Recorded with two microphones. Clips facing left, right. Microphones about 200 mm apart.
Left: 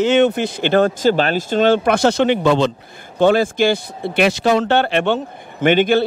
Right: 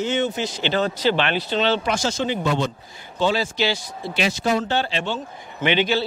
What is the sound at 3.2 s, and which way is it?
Speech, 55° left (ahead or behind).